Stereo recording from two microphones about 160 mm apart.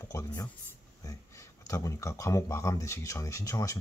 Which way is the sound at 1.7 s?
20° left (ahead or behind).